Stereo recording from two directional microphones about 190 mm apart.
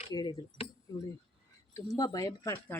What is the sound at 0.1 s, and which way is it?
Speech, 20° left (ahead or behind).